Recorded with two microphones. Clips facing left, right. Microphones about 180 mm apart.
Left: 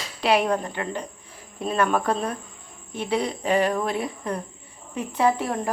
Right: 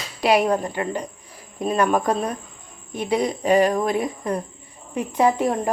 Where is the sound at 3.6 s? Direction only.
40° right (ahead or behind).